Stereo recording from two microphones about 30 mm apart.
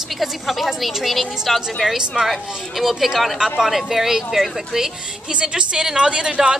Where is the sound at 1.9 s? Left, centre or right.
Centre.